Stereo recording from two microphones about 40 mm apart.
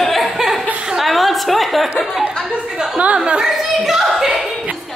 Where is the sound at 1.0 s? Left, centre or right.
Centre.